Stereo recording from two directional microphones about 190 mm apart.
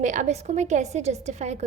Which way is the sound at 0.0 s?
40° right (ahead or behind).